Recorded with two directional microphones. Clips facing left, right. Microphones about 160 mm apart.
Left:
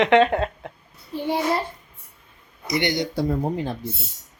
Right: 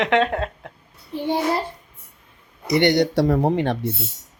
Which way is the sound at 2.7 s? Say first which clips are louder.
Right 7 dB; 65° right (ahead or behind).